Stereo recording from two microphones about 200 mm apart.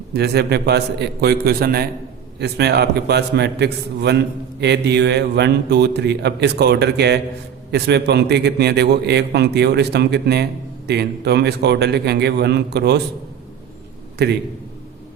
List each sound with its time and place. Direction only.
0.1 s a man's voice: 55° right (ahead or behind)